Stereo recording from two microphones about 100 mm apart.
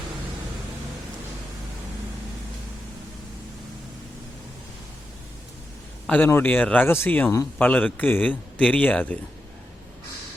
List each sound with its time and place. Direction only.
6.1 s speech: 20° left (ahead or behind)